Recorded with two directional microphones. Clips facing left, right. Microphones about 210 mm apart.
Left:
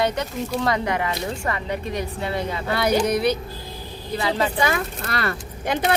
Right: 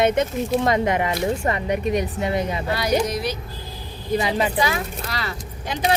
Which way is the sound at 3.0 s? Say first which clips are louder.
Left 5 dB; 60° left (ahead or behind).